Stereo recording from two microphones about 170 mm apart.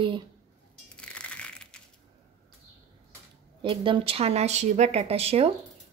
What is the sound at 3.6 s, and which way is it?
A woman's voice, 30° right (ahead or behind).